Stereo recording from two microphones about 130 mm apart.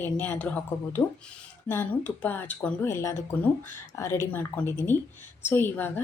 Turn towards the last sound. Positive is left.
turn(degrees=15)  # may be behind; listen again after turning